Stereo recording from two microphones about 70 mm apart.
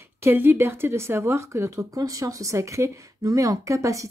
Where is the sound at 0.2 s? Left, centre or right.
Right.